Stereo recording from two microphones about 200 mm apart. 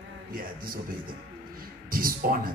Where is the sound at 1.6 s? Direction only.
45° right (ahead or behind).